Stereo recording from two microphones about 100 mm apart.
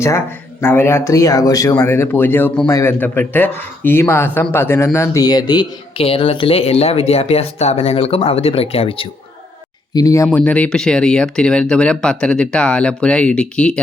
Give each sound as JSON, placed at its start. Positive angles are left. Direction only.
{"t": 0.6, "sound": "speech", "side_deg": 25}
{"t": 4.9, "sound": "speech", "side_deg": 35}
{"t": 6.0, "sound": "speech", "side_deg": 65}
{"t": 9.9, "sound": "speech", "side_deg": 35}
{"t": 10.3, "sound": "speech", "side_deg": 15}